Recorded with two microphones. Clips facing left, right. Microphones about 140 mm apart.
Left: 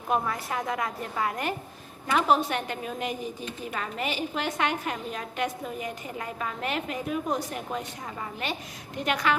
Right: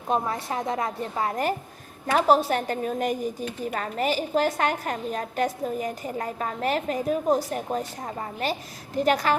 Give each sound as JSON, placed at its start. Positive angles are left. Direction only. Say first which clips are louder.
{"t": 0.1, "sound": "a woman's voice", "louder": "right 2 dB", "side_deg": -25}